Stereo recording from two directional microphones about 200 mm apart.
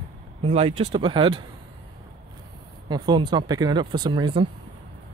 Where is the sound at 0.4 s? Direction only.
30° right (ahead or behind).